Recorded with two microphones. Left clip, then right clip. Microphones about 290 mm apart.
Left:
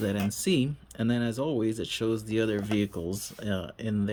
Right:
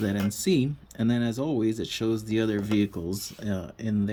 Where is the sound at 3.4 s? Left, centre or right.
Left.